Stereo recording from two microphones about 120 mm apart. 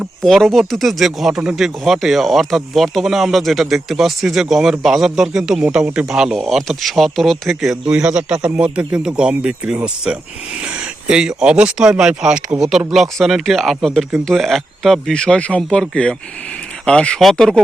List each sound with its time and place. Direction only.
0.2 s speech: centre (ahead or behind)